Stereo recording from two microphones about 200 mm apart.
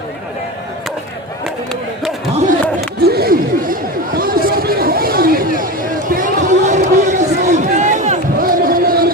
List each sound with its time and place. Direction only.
3.0 s chatter: 50° right (ahead or behind)